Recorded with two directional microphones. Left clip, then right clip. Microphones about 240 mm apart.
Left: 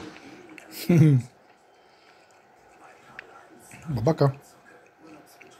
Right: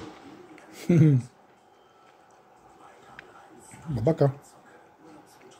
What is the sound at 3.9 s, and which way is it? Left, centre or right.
Speech, centre.